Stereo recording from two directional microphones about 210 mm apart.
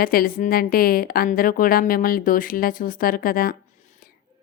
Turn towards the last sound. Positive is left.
turn(degrees=45)  # may be behind; listen again after turning